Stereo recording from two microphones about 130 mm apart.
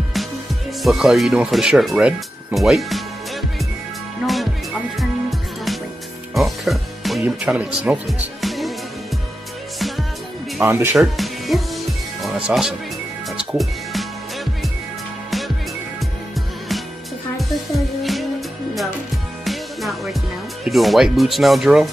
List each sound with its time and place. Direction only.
0.8 s speech: centre (ahead or behind)
4.2 s music: centre (ahead or behind)
7.2 s speech: 10° right (ahead or behind)
8.4 s music: centre (ahead or behind)
9.8 s music: centre (ahead or behind)
10.6 s speech: 15° right (ahead or behind)
11.0 s music: centre (ahead or behind)
17.4 s music: centre (ahead or behind)
19.4 s music: centre (ahead or behind)
20.6 s speech: centre (ahead or behind)